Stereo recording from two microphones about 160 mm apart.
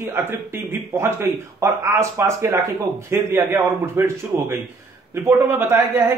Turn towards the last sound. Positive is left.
turn(degrees=-15)  # may be behind; listen again after turning